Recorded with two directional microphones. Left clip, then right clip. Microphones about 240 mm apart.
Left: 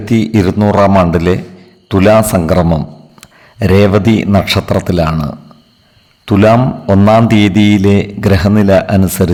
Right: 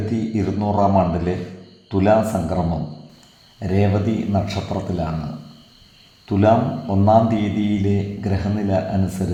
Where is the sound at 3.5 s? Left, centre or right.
Left.